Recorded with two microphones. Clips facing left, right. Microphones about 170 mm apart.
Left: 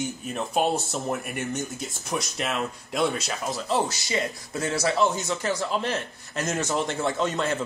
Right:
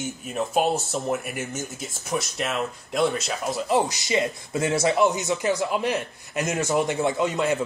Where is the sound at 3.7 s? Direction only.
20° right (ahead or behind).